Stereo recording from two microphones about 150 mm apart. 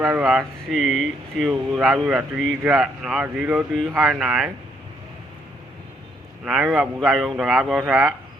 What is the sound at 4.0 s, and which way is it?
Speech, centre (ahead or behind).